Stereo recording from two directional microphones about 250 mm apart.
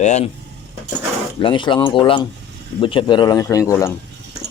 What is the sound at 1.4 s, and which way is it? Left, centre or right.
Speech, centre.